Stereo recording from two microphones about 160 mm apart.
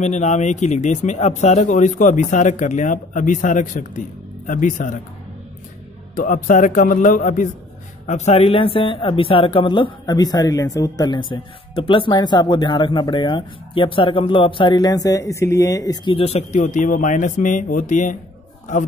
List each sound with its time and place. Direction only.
0.0 s speech: 45° left (ahead or behind)
6.1 s speech: 55° left (ahead or behind)
8.1 s speech: 40° left (ahead or behind)